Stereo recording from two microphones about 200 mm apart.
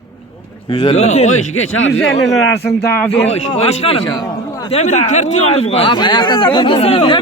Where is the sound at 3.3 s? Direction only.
30° left (ahead or behind).